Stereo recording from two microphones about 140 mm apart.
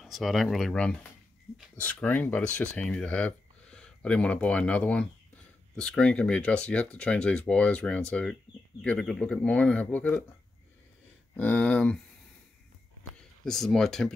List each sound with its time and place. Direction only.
0.0 s speech: centre (ahead or behind)
11.3 s speech: 10° left (ahead or behind)
13.5 s speech: 5° left (ahead or behind)